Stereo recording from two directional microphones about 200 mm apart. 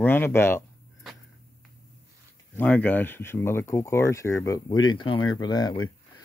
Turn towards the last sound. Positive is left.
turn(degrees=20)  # may be behind; listen again after turning